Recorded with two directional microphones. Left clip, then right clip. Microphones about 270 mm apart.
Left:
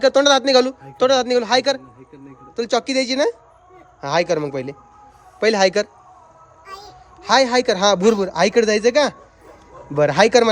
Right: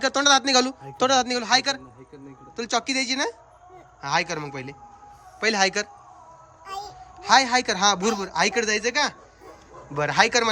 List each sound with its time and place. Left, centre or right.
0.0 s a man's voice: centre
7.2 s speech: centre